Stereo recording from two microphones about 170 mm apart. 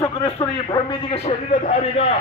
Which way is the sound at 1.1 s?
35° left (ahead or behind).